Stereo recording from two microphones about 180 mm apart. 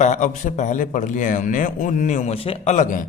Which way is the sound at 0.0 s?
45° left (ahead or behind).